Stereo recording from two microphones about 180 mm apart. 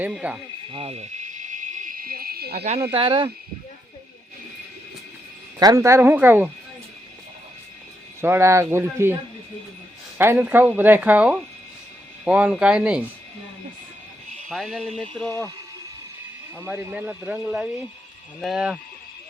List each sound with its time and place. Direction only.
0.0 s speech: 5° right (ahead or behind)
0.7 s cricket: 35° right (ahead or behind); by 2.6 s 60° right (ahead or behind)
2.9 s speech: 30° right (ahead or behind)
5.5 s speech: 20° right (ahead or behind)
8.2 s speech: 15° right (ahead or behind)
10.2 s speech: 10° right (ahead or behind)
14.5 s speech: centre (ahead or behind)
16.6 s speech: 10° right (ahead or behind)